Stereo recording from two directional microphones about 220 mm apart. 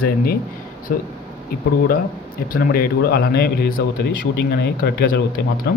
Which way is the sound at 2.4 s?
40° left (ahead or behind).